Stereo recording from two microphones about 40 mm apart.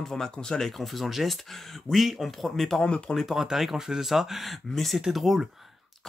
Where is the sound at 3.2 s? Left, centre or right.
Centre.